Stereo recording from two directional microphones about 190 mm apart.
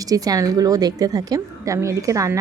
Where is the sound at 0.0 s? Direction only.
20° right (ahead or behind).